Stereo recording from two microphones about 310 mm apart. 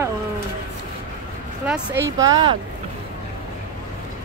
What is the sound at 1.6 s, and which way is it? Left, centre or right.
Speech, centre.